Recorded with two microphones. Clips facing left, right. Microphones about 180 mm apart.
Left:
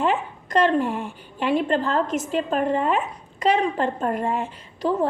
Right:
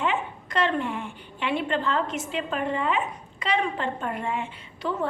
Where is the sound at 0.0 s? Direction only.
40° left (ahead or behind).